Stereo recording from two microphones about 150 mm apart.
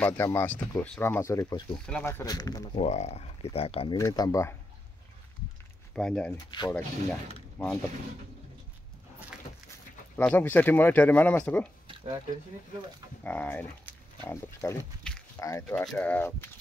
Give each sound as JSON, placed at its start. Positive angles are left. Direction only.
{"t": 0.0, "sound": "speech", "side_deg": 15}
{"t": 2.2, "sound": "speech", "side_deg": 25}
{"t": 2.7, "sound": "speech", "side_deg": 45}
{"t": 3.9, "sound": "speech", "side_deg": 25}
{"t": 5.9, "sound": "speech", "side_deg": 5}
{"t": 10.1, "sound": "speech", "side_deg": 10}
{"t": 13.2, "sound": "speech", "side_deg": 10}
{"t": 15.7, "sound": "speech", "side_deg": 5}